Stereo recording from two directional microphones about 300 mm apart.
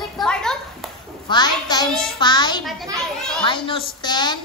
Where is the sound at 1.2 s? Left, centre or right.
Centre.